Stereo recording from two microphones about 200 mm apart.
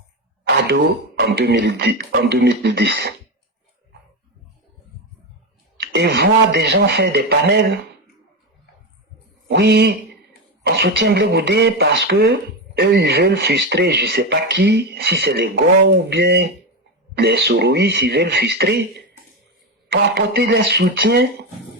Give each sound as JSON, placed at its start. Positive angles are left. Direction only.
{"t": 1.2, "sound": "speech", "side_deg": -55}
{"t": 5.7, "sound": "speech", "side_deg": -55}
{"t": 9.5, "sound": "speech", "side_deg": -55}